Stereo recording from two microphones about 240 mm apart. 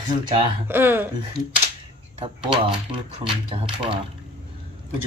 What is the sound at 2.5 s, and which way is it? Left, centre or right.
Speech, right.